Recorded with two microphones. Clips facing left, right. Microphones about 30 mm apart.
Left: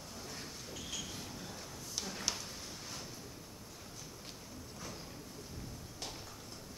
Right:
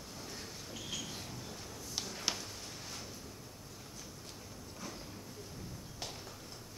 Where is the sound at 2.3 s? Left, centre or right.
Centre.